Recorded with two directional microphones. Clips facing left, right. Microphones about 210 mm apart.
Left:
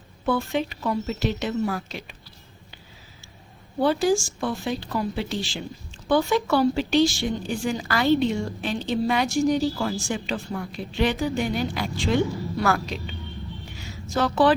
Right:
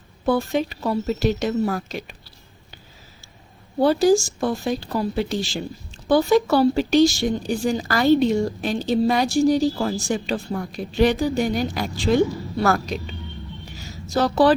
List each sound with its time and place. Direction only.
0.3 s speech: 40° right (ahead or behind)
3.8 s speech: 40° right (ahead or behind)
13.7 s a sound: 40° right (ahead or behind)